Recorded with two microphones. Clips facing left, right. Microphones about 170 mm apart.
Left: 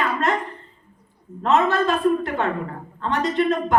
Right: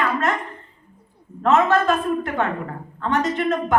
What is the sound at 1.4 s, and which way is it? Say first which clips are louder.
A woman's voice: right 2 dB; 45° right (ahead or behind).